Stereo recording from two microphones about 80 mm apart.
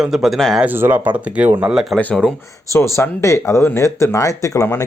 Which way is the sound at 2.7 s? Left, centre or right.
Left.